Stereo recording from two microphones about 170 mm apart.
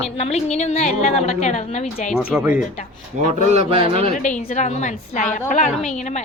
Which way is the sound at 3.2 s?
45° right (ahead or behind).